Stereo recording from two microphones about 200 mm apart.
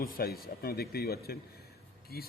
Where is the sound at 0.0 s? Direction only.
50° left (ahead or behind).